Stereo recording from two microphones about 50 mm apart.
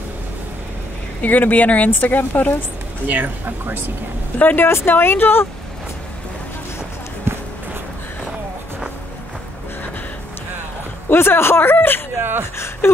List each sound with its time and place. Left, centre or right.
1.2 s speech: left
3.1 s speech: right
4.4 s speech: left
4.6 s speech: left
7.3 s run: right
11.1 s speech: left
12.2 s speech: right
12.5 s speech: left